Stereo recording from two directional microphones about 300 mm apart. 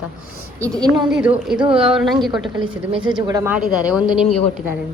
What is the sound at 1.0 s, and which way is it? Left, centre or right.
A woman's voice, centre.